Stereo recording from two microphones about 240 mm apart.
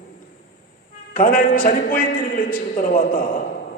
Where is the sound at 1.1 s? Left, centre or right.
Left.